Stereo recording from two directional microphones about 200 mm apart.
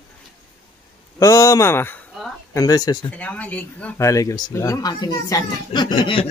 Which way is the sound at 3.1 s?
5° left (ahead or behind).